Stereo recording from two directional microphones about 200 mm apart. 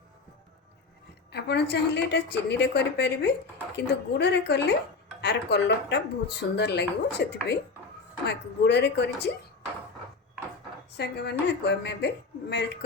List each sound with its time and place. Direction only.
1.3 s speech: 55° left (ahead or behind)
10.9 s speech: 55° left (ahead or behind)